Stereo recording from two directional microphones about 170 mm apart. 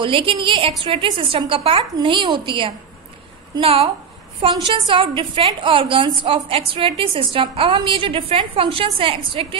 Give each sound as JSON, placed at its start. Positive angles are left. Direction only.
{"t": 0.0, "sound": "a woman's voice", "side_deg": -30}